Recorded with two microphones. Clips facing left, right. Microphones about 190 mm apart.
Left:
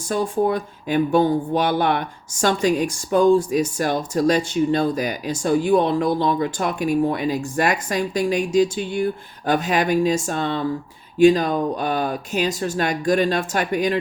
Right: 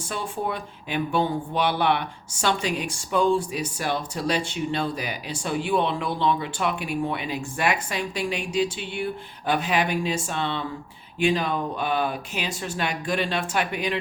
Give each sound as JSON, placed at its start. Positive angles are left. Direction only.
{"t": 0.0, "sound": "speech", "side_deg": 40}